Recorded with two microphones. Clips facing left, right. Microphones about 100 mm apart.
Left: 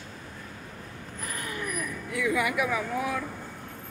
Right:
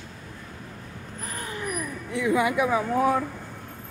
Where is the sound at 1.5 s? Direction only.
25° right (ahead or behind).